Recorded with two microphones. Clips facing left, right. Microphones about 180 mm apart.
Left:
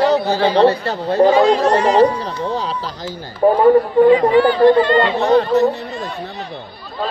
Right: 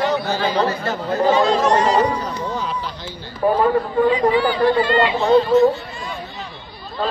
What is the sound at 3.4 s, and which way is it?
Speech, 30° left (ahead or behind).